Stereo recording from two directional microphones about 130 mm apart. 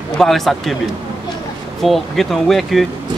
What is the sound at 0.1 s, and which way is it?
Speech, 5° left (ahead or behind).